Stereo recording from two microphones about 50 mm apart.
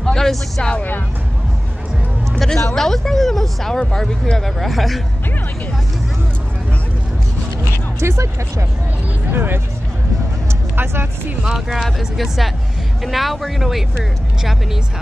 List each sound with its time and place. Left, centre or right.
0.0 s speech: centre
2.5 s speech: centre
4.6 s speech: centre
8.0 s speech: right
9.3 s speech: right
10.8 s speech: right
11.5 s speech: centre